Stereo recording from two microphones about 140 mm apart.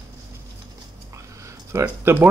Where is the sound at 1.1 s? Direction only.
20° right (ahead or behind).